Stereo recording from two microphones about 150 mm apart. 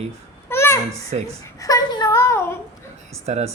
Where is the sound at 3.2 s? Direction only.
45° right (ahead or behind).